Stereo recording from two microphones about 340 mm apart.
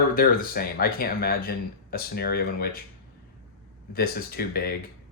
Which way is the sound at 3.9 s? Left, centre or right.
Left.